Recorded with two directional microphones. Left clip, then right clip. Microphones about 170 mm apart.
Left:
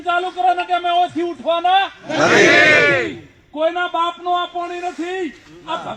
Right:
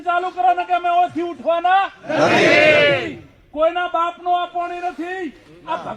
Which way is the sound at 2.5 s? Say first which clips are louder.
Left 1 dB; 45° right (ahead or behind).